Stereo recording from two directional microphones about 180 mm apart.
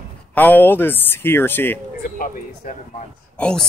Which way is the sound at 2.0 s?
50° left (ahead or behind).